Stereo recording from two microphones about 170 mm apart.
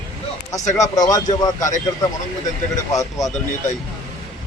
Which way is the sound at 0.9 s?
20° left (ahead or behind).